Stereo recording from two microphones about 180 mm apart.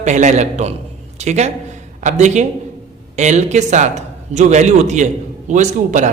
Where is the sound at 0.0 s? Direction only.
40° right (ahead or behind).